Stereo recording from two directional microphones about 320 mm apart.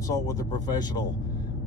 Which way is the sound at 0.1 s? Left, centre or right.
Centre.